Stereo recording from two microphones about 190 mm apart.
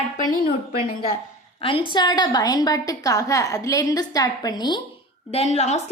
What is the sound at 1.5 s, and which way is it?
A woman's voice, 30° left (ahead or behind).